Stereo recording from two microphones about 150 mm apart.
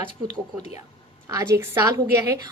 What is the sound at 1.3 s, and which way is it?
A woman's voice, 20° right (ahead or behind).